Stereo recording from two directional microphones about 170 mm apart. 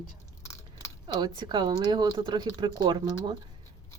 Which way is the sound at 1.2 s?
25° right (ahead or behind).